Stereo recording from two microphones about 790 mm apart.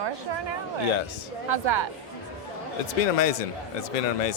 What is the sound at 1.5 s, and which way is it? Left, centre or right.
Speech, right.